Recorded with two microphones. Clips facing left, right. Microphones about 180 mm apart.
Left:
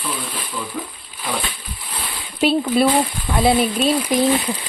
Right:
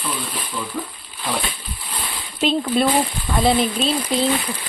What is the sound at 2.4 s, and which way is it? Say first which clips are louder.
Speech: left 2 dB; 10° left (ahead or behind).